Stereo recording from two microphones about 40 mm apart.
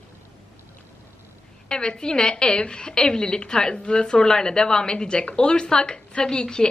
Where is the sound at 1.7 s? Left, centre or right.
Left.